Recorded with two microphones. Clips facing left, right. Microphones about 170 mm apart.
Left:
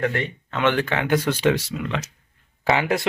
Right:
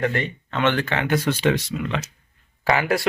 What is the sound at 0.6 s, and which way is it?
Speech, 10° left (ahead or behind).